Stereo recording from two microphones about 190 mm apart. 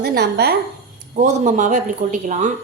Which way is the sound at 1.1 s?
40° right (ahead or behind).